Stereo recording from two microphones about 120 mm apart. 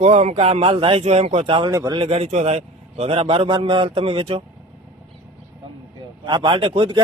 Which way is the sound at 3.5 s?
40° right (ahead or behind).